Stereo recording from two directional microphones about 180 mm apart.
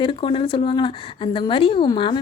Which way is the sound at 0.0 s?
30° left (ahead or behind).